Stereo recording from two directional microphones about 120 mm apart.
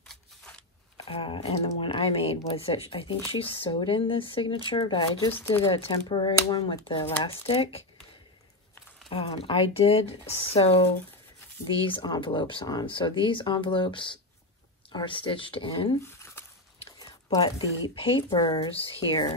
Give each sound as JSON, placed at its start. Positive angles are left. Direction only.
{"t": 1.0, "sound": "speech", "side_deg": 45}
{"t": 5.3, "sound": "speech", "side_deg": 15}
{"t": 5.7, "sound": "speech", "side_deg": 45}
{"t": 9.1, "sound": "speech", "side_deg": 50}
{"t": 16.1, "sound": "a sound", "side_deg": 20}
{"t": 17.0, "sound": "speech", "side_deg": 35}